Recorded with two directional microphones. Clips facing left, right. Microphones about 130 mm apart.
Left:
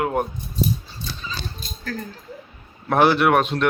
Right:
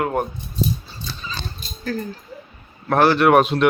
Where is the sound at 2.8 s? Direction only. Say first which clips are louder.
Right 1 dB; 10° left (ahead or behind).